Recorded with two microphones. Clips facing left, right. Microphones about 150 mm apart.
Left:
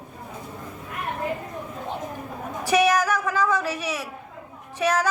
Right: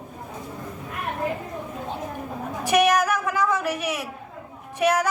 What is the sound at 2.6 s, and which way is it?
A man's voice, 15° right (ahead or behind).